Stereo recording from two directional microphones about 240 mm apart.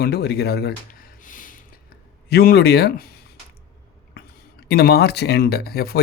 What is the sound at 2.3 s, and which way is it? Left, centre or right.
Speech, left.